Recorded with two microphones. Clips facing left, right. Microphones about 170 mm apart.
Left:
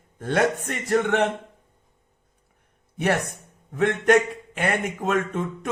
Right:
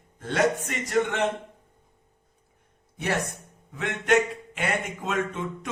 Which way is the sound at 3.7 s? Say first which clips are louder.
Left 4 dB; 50° left (ahead or behind).